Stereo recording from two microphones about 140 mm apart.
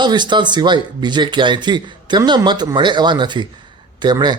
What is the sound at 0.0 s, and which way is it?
Speech, 30° right (ahead or behind).